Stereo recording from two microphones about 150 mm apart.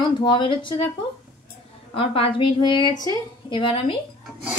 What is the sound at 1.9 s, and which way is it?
A woman's voice, 40° left (ahead or behind).